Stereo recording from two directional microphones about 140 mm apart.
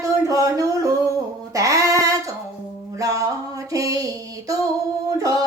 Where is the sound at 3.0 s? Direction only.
25° right (ahead or behind).